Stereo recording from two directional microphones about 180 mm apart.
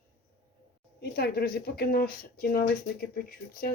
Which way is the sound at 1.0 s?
60° left (ahead or behind).